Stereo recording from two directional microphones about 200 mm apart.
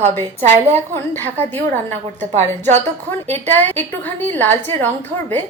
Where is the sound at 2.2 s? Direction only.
35° right (ahead or behind).